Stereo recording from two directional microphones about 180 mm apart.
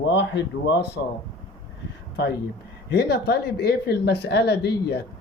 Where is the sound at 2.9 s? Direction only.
65° left (ahead or behind).